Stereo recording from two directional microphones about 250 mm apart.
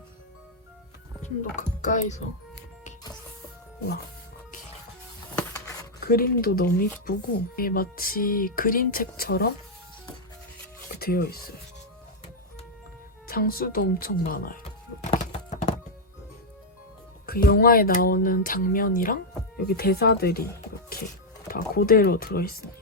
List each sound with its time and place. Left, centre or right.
1.2 s speech: left
6.0 s speech: left
11.0 s speech: left
13.2 s speech: left
14.6 s music: left
17.2 s speech: left
21.4 s speech: left